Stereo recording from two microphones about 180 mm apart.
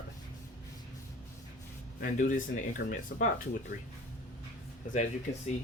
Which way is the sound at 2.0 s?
45° left (ahead or behind).